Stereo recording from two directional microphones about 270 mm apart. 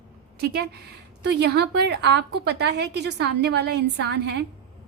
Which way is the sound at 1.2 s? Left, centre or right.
Right.